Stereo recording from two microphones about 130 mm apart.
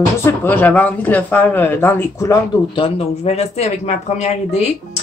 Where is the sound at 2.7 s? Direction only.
50° left (ahead or behind).